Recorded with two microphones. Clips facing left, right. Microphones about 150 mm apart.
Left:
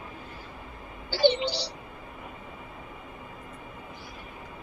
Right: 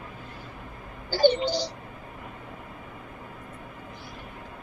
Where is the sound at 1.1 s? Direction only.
45° right (ahead or behind).